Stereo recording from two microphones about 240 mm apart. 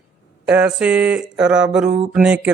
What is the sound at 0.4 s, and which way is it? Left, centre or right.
Speech, centre.